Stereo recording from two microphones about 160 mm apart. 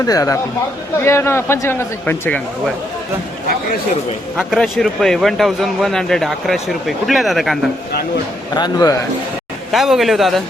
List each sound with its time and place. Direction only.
0.0 s a man's voice: 20° left (ahead or behind)
4.4 s speech: centre (ahead or behind)
8.5 s a man's voice: 25° left (ahead or behind)
9.7 s speech: centre (ahead or behind)